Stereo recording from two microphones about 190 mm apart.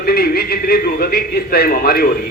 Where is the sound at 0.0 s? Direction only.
55° left (ahead or behind).